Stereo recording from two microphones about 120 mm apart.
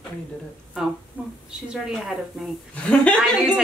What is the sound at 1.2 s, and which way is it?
A woman's voice, 15° right (ahead or behind).